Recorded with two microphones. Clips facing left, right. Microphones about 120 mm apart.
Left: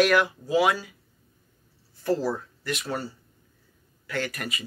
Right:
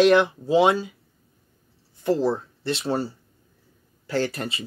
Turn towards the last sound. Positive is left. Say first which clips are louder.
# right 5 dB
turn(degrees=-30)  # may be behind; listen again after turning